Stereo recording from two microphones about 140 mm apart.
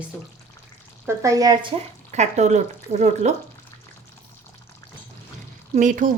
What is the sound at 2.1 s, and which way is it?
Speech, 55° right (ahead or behind).